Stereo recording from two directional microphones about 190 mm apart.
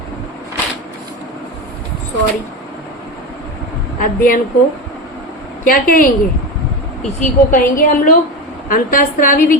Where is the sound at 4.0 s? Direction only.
45° left (ahead or behind).